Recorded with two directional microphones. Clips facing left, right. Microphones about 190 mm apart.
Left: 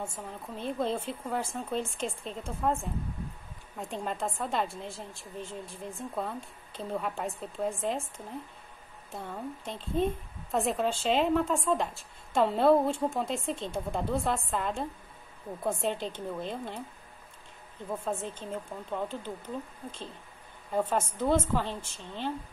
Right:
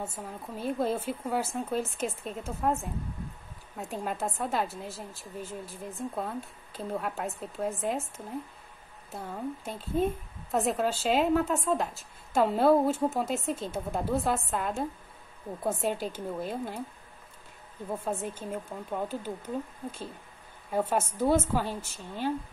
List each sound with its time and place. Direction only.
0.0 s speech: 5° right (ahead or behind)
9.1 s a woman's voice: 5° right (ahead or behind)
17.8 s a woman's voice: 10° right (ahead or behind)
20.7 s a woman's voice: 10° right (ahead or behind)